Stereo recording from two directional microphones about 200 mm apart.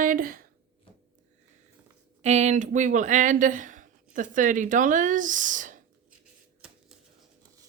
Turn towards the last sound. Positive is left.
turn(degrees=-40)  # may be behind; listen again after turning